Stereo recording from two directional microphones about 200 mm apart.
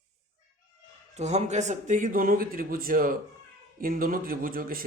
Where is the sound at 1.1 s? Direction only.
35° right (ahead or behind).